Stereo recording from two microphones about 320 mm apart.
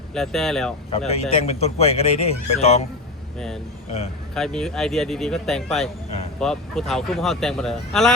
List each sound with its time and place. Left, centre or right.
0.1 s speech: centre
0.9 s speech: centre
3.3 s speech: centre